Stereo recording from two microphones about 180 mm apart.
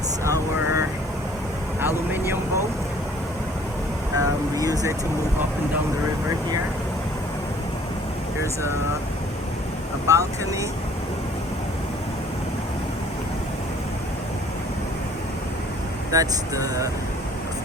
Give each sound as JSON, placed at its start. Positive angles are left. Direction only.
{"t": 0.3, "sound": "vehicle", "side_deg": -15}
{"t": 4.2, "sound": "vehicle", "side_deg": -20}
{"t": 10.1, "sound": "speech", "side_deg": -15}
{"t": 16.1, "sound": "speech", "side_deg": -20}